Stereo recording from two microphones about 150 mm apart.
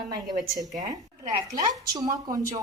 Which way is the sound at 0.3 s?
25° right (ahead or behind).